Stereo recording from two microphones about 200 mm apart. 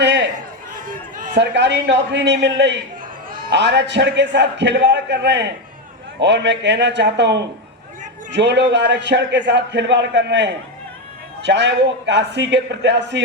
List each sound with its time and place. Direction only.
0.0 s a sound: 60° right (ahead or behind)
0.8 s run: 40° right (ahead or behind)
1.4 s a man's voice: 60° right (ahead or behind)